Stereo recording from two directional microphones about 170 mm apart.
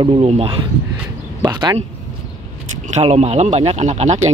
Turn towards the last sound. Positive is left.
turn(degrees=-40)  # may be behind; listen again after turning